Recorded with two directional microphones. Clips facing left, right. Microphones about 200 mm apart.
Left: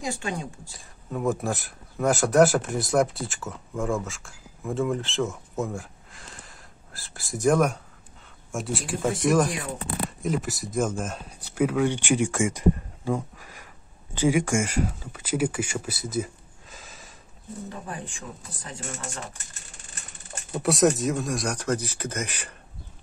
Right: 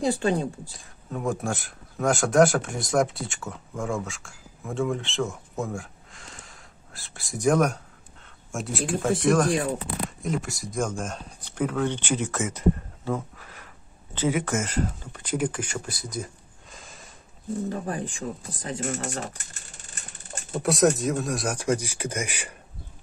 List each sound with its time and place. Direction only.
0.7 s speech: centre (ahead or behind)
16.7 s a sound: centre (ahead or behind)
17.6 s speech: 35° right (ahead or behind)
20.5 s speech: centre (ahead or behind)